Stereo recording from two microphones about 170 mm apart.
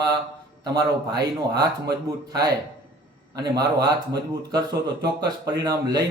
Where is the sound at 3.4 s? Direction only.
25° right (ahead or behind).